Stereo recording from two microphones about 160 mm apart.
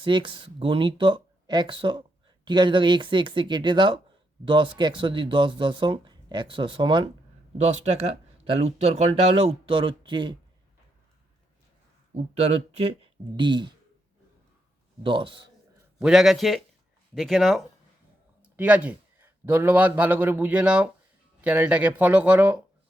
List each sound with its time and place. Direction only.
0.0 s speech: 30° right (ahead or behind)
8.4 s speech: 40° right (ahead or behind)
12.1 s speech: 40° right (ahead or behind)
13.3 s speech: 30° right (ahead or behind)
15.0 s speech: 30° right (ahead or behind)
16.0 s a man's voice: 5° right (ahead or behind)